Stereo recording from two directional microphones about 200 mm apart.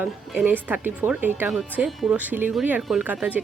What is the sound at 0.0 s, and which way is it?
Speech, 10° right (ahead or behind).